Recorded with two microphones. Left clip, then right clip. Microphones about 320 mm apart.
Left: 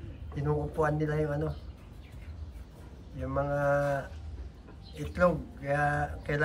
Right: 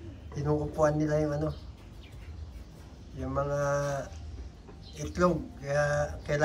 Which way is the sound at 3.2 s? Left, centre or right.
Centre.